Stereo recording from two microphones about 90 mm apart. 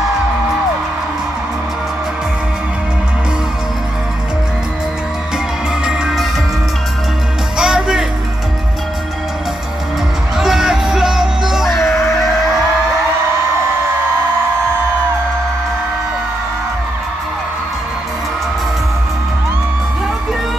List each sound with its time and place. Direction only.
5.9 s music: 10° right (ahead or behind)
7.5 s music: 5° right (ahead or behind)
10.3 s music: 5° right (ahead or behind)
11.7 s music: 30° left (ahead or behind)